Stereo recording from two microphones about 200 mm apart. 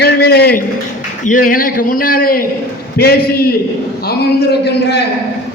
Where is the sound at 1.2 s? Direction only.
40° left (ahead or behind).